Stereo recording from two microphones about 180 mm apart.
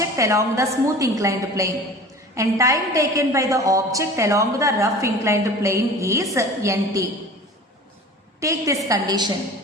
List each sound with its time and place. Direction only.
0.0 s a woman's voice: 15° right (ahead or behind)
8.4 s a woman's voice: 15° right (ahead or behind)